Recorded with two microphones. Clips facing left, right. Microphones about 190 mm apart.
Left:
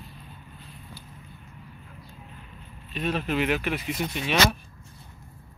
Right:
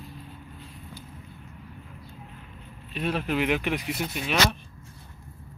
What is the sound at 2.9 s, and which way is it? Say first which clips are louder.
Speech: even; 10° right (ahead or behind).